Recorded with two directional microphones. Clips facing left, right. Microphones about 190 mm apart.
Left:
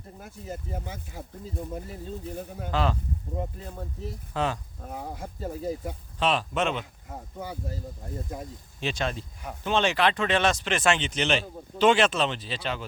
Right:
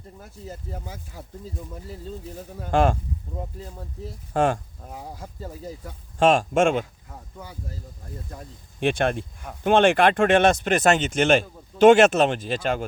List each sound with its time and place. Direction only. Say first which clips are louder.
2.6 s speech: right 7 dB; 50° right (ahead or behind)
4.4 s speech: right 7 dB; 50° right (ahead or behind)
6.1 s speech: right 8 dB; 45° right (ahead or behind)
8.8 s speech: right 8 dB; 55° right (ahead or behind)